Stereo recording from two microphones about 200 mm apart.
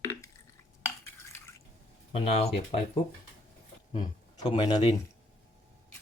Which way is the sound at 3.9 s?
25° left (ahead or behind).